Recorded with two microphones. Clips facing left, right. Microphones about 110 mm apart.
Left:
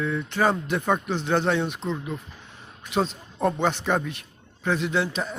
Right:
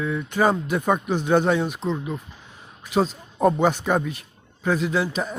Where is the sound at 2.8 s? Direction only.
5° right (ahead or behind).